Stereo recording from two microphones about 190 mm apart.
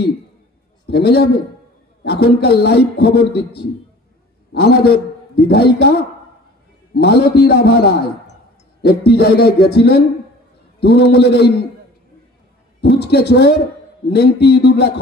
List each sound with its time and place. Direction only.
0.8 s a man's voice: 60° left (ahead or behind)
12.8 s a man's voice: 60° left (ahead or behind)